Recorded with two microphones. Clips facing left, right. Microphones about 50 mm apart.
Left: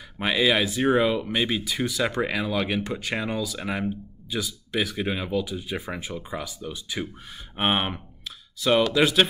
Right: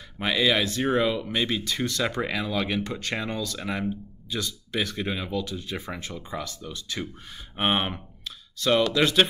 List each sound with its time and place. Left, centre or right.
0.2 s speech: centre